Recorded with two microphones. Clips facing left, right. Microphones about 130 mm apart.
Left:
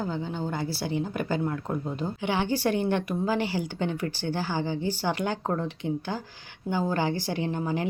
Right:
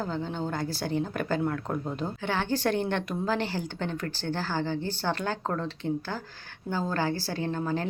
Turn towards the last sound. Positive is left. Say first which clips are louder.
# left 1 dB
turn(degrees=15)  # may be behind; listen again after turning